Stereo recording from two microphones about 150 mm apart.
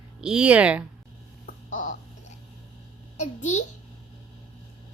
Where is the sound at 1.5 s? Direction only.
60° left (ahead or behind).